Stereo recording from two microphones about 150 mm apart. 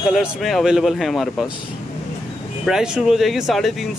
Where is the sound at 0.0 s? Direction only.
5° right (ahead or behind).